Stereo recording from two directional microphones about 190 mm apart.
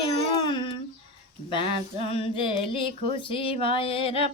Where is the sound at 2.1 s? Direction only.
30° left (ahead or behind).